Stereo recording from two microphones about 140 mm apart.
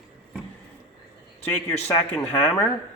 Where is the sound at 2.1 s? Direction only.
10° left (ahead or behind).